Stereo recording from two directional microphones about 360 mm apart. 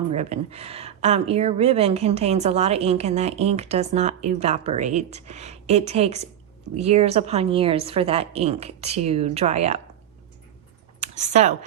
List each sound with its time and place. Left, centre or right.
0.1 s speech: centre
11.0 s speech: centre